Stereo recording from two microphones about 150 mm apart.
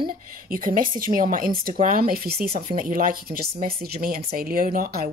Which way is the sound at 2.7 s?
70° right (ahead or behind).